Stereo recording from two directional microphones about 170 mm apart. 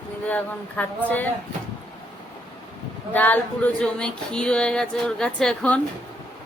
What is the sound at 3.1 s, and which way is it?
Speech, 10° left (ahead or behind).